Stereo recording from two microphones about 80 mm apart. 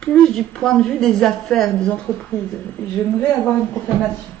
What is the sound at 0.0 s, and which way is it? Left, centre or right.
A woman's voice, centre.